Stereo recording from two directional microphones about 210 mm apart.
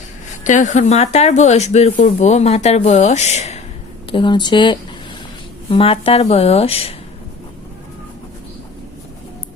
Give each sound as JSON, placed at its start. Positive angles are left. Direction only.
{"t": 0.4, "sound": "speech", "side_deg": 35}
{"t": 4.1, "sound": "a woman's voice", "side_deg": 20}